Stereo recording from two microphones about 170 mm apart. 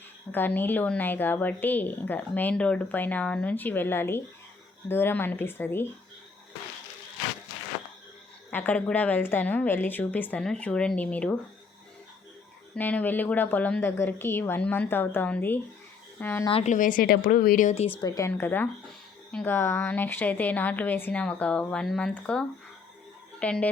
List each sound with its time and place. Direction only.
0.3 s speech: 10° left (ahead or behind)
8.4 s speech: 10° left (ahead or behind)
12.7 s speech: 10° left (ahead or behind)
16.5 s a woman's voice: 35° left (ahead or behind)
16.7 s a woman's voice: 50° left (ahead or behind)
18.0 s speech: 20° left (ahead or behind)